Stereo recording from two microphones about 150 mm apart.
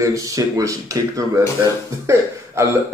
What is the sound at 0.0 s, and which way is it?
Speech, 20° right (ahead or behind).